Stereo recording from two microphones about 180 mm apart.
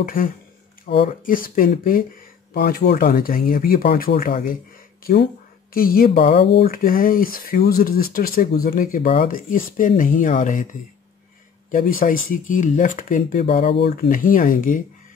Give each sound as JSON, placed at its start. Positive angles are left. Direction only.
{"t": 0.0, "sound": "speech", "side_deg": 50}
{"t": 0.8, "sound": "speech", "side_deg": 35}
{"t": 1.2, "sound": "speech", "side_deg": 50}
{"t": 2.5, "sound": "speech", "side_deg": 65}
{"t": 6.4, "sound": "speech", "side_deg": 65}
{"t": 11.7, "sound": "speech", "side_deg": 50}
{"t": 13.5, "sound": "speech", "side_deg": 35}
{"t": 14.0, "sound": "speech", "side_deg": 50}